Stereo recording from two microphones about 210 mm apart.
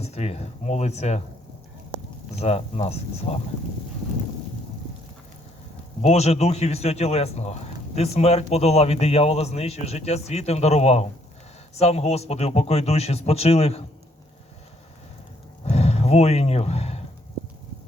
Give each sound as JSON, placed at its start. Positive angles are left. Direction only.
{"t": 0.0, "sound": "a man's voice", "side_deg": 30}
{"t": 2.4, "sound": "a man's voice", "side_deg": 30}
{"t": 6.0, "sound": "a man's voice", "side_deg": 30}
{"t": 15.6, "sound": "a sound", "side_deg": 30}